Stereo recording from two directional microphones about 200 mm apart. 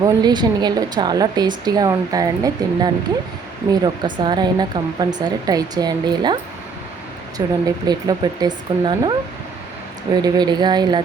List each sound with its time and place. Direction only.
0.0 s a woman's voice: 20° right (ahead or behind)
7.4 s a woman's voice: 15° right (ahead or behind)
10.2 s a woman's voice: 20° right (ahead or behind)